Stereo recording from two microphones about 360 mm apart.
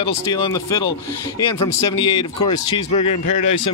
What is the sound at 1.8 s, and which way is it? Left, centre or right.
Speech, centre.